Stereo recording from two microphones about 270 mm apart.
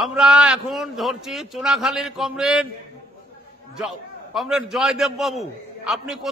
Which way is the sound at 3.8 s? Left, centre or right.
Centre.